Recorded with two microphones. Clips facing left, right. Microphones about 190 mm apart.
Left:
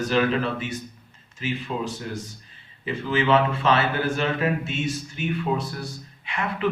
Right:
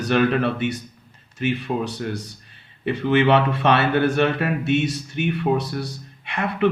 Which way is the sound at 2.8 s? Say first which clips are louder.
Right 5 dB; 65° right (ahead or behind).